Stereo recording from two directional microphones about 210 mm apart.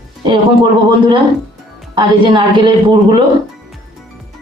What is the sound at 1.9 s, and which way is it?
A woman's voice, 20° right (ahead or behind).